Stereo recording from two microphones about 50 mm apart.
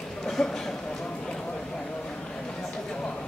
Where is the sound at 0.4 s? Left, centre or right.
Centre.